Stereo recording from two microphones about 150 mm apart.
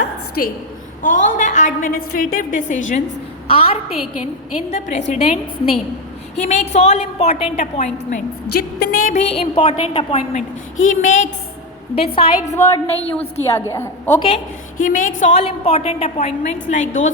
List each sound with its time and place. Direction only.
0.0 s a sound: 90° left
1.0 s a woman's voice: 55° left (ahead or behind)
3.4 s a woman's voice: 40° left (ahead or behind)
4.7 s a woman's voice: 50° left (ahead or behind)
8.1 s a woman's voice: 85° left
9.1 s a woman's voice: 45° left (ahead or behind)
10.3 s a woman's voice: 60° left (ahead or behind)
11.9 s a woman's voice: 40° left (ahead or behind)
12.5 s a woman's voice: 20° left (ahead or behind)
14.2 s a woman's voice: 40° left (ahead or behind)
14.8 s a woman's voice: 65° left (ahead or behind)